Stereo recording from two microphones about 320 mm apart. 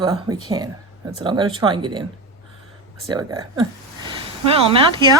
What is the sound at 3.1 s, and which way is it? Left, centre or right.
Speech, centre.